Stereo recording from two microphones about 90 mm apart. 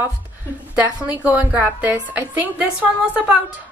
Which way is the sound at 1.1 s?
15° right (ahead or behind).